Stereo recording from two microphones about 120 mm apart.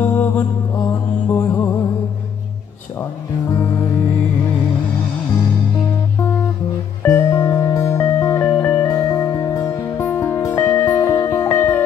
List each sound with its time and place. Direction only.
0.0 s mantra: 15° left (ahead or behind)
1.3 s music: 15° left (ahead or behind)
3.4 s music: 30° left (ahead or behind)
7.0 s music: 20° left (ahead or behind)